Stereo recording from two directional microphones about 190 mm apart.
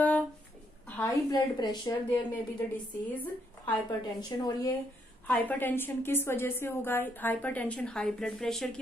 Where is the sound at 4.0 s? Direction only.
20° left (ahead or behind).